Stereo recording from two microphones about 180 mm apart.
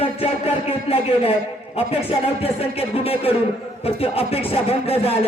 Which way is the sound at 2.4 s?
35° left (ahead or behind).